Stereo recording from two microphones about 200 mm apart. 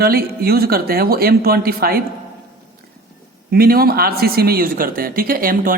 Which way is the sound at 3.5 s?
50° right (ahead or behind).